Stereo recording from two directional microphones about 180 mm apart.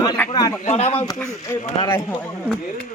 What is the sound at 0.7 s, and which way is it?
Speech, 35° left (ahead or behind).